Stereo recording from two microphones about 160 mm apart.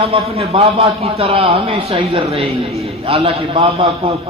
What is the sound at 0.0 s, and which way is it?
A man's voice, 40° right (ahead or behind).